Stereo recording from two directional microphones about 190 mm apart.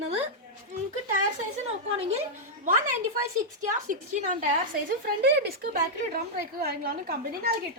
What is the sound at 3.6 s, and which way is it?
Speech, 45° right (ahead or behind).